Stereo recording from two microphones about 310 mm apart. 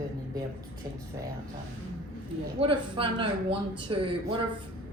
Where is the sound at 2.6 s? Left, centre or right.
Centre.